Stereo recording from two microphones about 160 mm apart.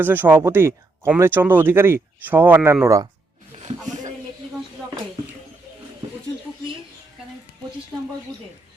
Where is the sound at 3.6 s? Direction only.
45° right (ahead or behind).